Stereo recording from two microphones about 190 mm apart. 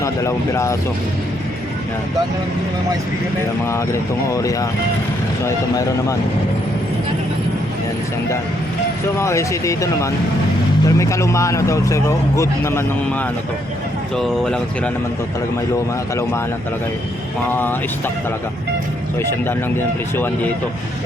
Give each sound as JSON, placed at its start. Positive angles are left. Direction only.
{"t": 0.0, "sound": "speech", "side_deg": 15}
{"t": 3.7, "sound": "speech", "side_deg": 15}
{"t": 9.1, "sound": "speech", "side_deg": 15}
{"t": 14.2, "sound": "speech", "side_deg": 5}
{"t": 17.5, "sound": "speech", "side_deg": 10}
{"t": 19.2, "sound": "speech", "side_deg": 10}